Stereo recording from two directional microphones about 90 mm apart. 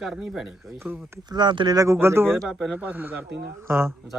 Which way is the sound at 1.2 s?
55° right (ahead or behind).